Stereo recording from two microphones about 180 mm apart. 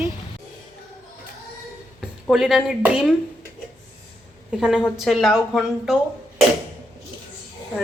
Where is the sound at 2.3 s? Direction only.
Centre (ahead or behind).